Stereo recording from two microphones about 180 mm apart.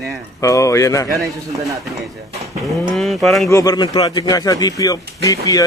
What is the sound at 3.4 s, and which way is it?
A man's voice, 20° left (ahead or behind).